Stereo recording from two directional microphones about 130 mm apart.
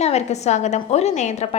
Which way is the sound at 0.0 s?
55° left (ahead or behind).